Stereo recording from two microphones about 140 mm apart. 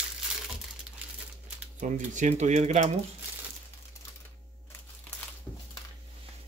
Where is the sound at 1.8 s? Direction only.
60° right (ahead or behind).